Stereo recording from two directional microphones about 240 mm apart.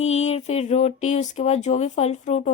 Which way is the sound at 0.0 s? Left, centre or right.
Left.